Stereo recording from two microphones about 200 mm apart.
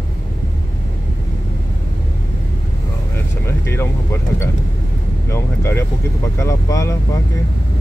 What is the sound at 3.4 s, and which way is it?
Vehicle, 15° left (ahead or behind).